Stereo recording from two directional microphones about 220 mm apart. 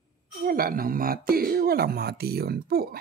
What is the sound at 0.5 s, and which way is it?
Speech, 40° right (ahead or behind).